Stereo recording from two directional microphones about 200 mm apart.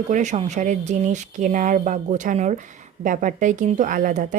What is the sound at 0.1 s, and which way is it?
A woman's voice, 35° right (ahead or behind).